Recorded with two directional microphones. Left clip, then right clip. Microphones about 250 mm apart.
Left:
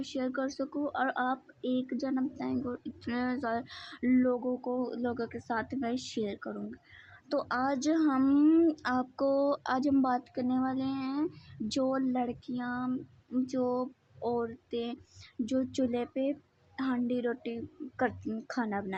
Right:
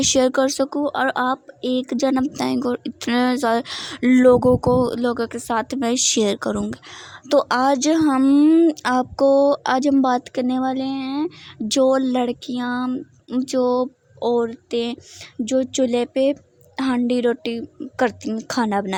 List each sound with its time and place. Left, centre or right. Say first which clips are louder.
0.0 s a woman's voice: right 17 dB; right